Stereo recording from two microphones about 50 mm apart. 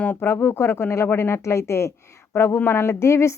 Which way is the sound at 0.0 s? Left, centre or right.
Left.